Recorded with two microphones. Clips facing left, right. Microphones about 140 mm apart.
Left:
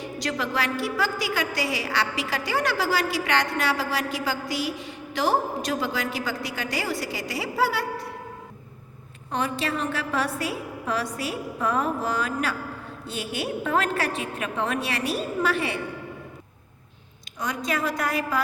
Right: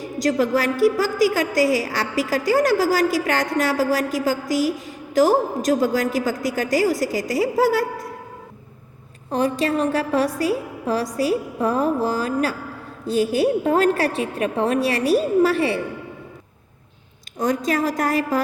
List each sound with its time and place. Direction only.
0.0 s a woman's voice: 45° right (ahead or behind)
9.3 s a woman's voice: 35° right (ahead or behind)
17.3 s a woman's voice: 45° right (ahead or behind)